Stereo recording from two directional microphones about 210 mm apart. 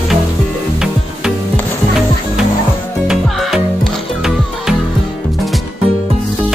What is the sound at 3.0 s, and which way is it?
Music, centre (ahead or behind).